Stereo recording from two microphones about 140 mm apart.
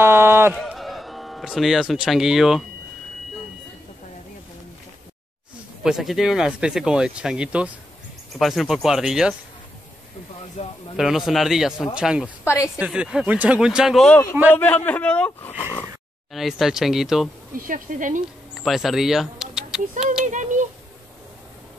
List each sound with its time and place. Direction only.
0.0 s a sound: 15° right (ahead or behind)
0.7 s speech: centre (ahead or behind)
5.9 s speech: 5° right (ahead or behind)
10.6 s a man's voice: 45° left (ahead or behind)
11.0 s speech: centre (ahead or behind)
12.4 s speech: 20° left (ahead or behind)
12.7 s speech: 5° right (ahead or behind)
14.6 s a man's voice: 10° left (ahead or behind)
16.3 s speech: centre (ahead or behind)
17.6 s speech: 75° right (ahead or behind)
18.6 s speech: centre (ahead or behind)
19.9 s speech: 65° right (ahead or behind)